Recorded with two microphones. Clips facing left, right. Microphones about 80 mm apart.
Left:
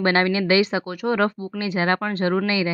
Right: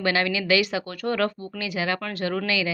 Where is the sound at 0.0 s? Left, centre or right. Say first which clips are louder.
Left 4 dB; left.